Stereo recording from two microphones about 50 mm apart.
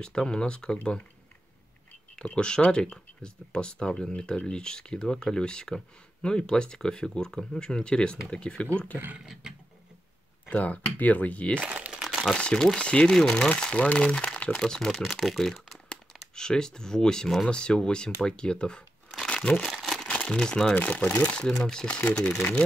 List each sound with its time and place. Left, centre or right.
0.0 s speech: centre
2.1 s speech: centre
9.2 s a sound: centre
10.5 s speech: left
11.6 s crumpling: right
12.0 s crumpling: centre
12.4 s speech: centre
14.2 s crumpling: left
14.6 s speech: centre
19.2 s crumpling: centre
19.6 s crumpling: centre
20.1 s speech: centre
20.7 s speech: left
21.4 s speech: centre